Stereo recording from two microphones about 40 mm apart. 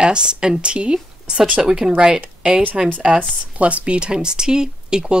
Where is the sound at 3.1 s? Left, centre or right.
Right.